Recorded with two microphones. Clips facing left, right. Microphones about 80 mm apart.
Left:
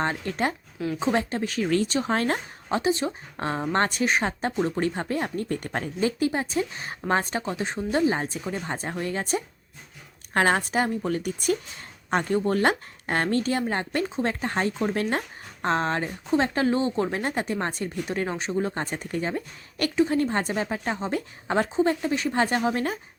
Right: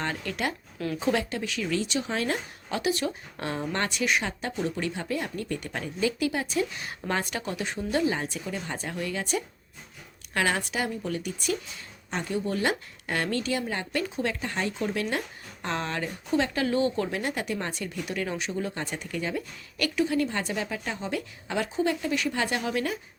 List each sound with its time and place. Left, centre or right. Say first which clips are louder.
0.0 s a woman's voice: left 4 dB; left